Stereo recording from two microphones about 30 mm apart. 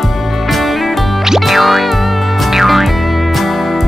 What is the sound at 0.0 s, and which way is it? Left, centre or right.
Music, centre.